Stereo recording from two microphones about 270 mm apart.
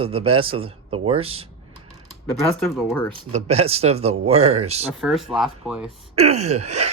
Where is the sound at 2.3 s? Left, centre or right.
Centre.